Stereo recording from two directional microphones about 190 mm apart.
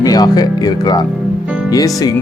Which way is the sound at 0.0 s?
20° left (ahead or behind).